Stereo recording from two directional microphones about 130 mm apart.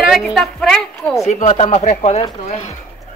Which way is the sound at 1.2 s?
60° left (ahead or behind).